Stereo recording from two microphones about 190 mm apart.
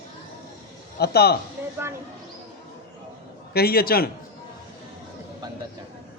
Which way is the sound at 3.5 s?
55° left (ahead or behind).